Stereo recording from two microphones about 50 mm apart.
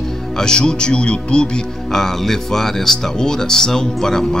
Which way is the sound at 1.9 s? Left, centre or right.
Centre.